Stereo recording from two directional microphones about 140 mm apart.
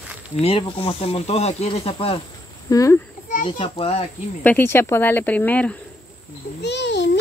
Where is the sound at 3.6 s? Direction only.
45° left (ahead or behind).